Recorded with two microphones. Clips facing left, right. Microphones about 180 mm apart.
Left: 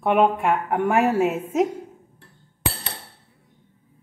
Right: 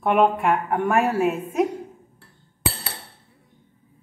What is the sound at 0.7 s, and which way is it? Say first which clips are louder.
Speech: left 1 dB; 15° left (ahead or behind).